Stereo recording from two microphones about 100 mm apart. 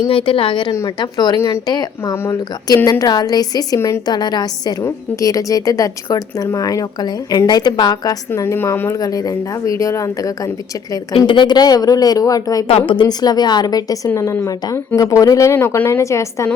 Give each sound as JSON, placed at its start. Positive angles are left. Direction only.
{"t": 0.1, "sound": "a woman's voice", "side_deg": 65}
{"t": 0.9, "sound": "a woman's voice", "side_deg": 45}
{"t": 1.4, "sound": "speech", "side_deg": 30}
{"t": 2.7, "sound": "speech", "side_deg": 40}
{"t": 3.8, "sound": "speech", "side_deg": 25}
{"t": 4.0, "sound": "a woman's voice", "side_deg": 45}
{"t": 4.8, "sound": "speech", "side_deg": 35}
{"t": 8.5, "sound": "speech", "side_deg": 20}
{"t": 11.3, "sound": "speech", "side_deg": 50}
{"t": 12.6, "sound": "a woman's voice", "side_deg": 65}